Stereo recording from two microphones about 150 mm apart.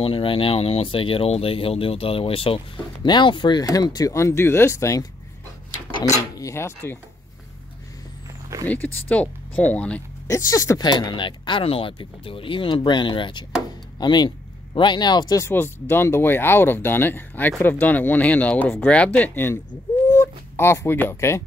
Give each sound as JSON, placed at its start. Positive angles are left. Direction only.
{"t": 0.0, "sound": "speech", "side_deg": 35}
{"t": 6.3, "sound": "speech", "side_deg": 20}
{"t": 8.6, "sound": "speech", "side_deg": 10}
{"t": 10.2, "sound": "speech", "side_deg": 20}
{"t": 20.1, "sound": "a sound", "side_deg": 15}